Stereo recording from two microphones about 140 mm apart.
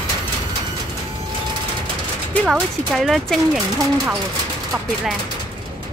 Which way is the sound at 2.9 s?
Centre (ahead or behind).